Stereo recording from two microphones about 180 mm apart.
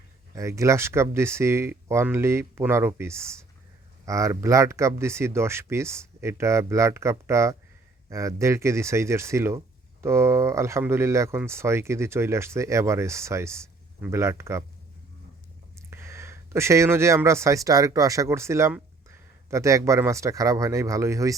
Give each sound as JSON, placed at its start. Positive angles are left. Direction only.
{"t": 0.3, "sound": "speech", "side_deg": -15}
{"t": 15.9, "sound": "speech", "side_deg": -15}